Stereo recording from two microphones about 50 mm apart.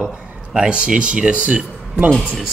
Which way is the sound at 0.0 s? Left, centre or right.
Centre.